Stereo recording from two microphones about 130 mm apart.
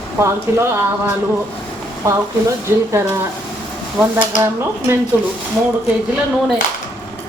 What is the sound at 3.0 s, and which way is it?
Speech, 15° right (ahead or behind).